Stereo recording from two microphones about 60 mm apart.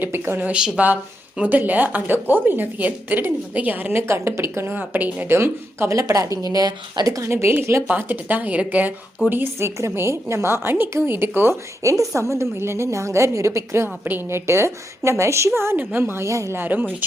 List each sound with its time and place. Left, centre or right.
0.0 s a woman's voice: right
0.4 s a woman's voice: right
4.1 s a woman's voice: right
4.8 s a woman's voice: right
5.3 s a woman's voice: right
5.9 s a woman's voice: right
7.3 s a woman's voice: right
7.9 s a woman's voice: right
9.6 s a woman's voice: right
11.8 s a woman's voice: right
15.8 s a woman's voice: right
16.2 s speech: right
16.6 s a woman's voice: right